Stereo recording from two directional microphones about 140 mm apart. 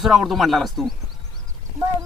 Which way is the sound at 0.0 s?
Centre (ahead or behind).